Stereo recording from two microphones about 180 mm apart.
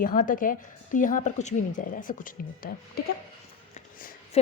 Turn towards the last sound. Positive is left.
turn(degrees=35)  # may be behind; listen again after turning